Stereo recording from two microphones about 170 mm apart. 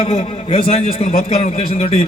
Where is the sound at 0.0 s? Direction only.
35° left (ahead or behind).